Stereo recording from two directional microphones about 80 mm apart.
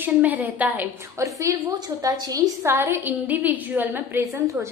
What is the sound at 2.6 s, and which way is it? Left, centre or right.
A woman's voice, right.